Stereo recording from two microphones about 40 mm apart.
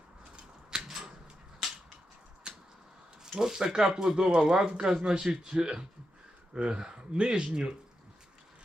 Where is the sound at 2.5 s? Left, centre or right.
Right.